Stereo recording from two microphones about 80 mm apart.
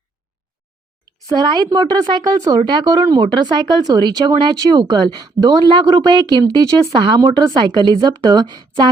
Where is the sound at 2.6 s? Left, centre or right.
Right.